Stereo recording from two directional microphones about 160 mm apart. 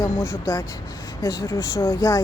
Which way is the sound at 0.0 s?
20° left (ahead or behind).